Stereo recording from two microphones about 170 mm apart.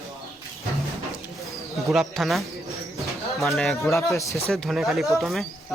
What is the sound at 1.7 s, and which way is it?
Speech, centre (ahead or behind).